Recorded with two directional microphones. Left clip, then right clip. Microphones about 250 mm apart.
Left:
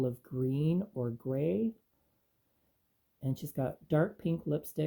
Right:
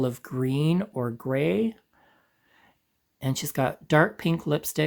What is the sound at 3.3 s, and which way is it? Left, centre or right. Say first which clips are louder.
Speech: right 11 dB; centre.